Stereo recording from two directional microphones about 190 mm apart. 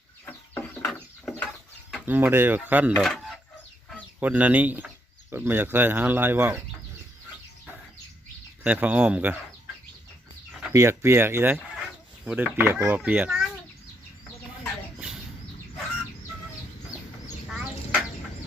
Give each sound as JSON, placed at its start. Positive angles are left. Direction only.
{"t": 0.3, "sound": "bird", "side_deg": 10}
{"t": 2.0, "sound": "speech", "side_deg": -10}
{"t": 4.2, "sound": "speech", "side_deg": -10}
{"t": 8.6, "sound": "speech", "side_deg": -5}
{"t": 10.7, "sound": "speech", "side_deg": -15}
{"t": 14.6, "sound": "chicken", "side_deg": -5}
{"t": 17.5, "sound": "a sound", "side_deg": -5}